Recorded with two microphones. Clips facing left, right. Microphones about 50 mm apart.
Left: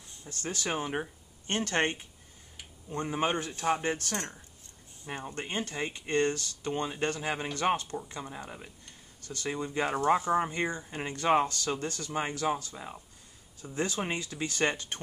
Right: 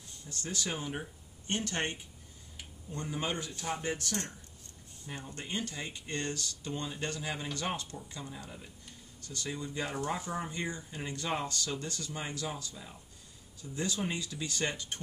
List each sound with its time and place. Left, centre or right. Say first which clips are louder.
0.3 s speech: left 4 dB; left